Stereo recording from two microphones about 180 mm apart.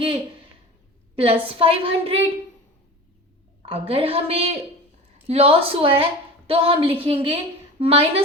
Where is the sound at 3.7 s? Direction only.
30° right (ahead or behind).